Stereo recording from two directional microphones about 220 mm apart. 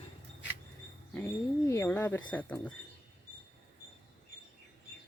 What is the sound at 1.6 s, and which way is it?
Speech, 10° left (ahead or behind).